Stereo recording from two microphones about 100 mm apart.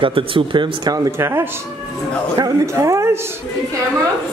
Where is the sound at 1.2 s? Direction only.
25° right (ahead or behind).